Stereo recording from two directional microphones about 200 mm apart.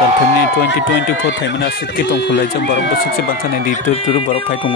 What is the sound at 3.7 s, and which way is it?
Speech, 35° left (ahead or behind).